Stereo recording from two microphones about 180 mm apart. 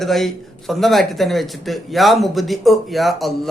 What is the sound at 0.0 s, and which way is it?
A man's voice, centre (ahead or behind).